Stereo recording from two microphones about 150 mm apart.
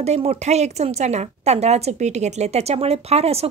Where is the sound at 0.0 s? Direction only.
45° right (ahead or behind).